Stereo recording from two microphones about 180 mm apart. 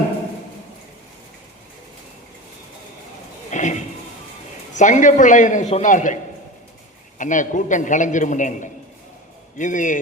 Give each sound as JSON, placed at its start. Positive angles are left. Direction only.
{"t": 3.5, "sound": "a sound", "side_deg": 40}
{"t": 4.7, "sound": "a man's voice", "side_deg": 45}
{"t": 7.2, "sound": "a man's voice", "side_deg": 45}